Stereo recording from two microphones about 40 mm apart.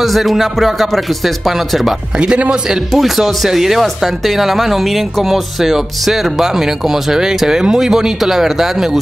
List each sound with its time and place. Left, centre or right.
0.0 s speech: centre
2.1 s a man's voice: right
2.7 s speech: centre